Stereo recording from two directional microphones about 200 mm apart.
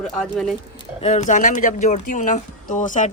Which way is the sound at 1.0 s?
35° left (ahead or behind).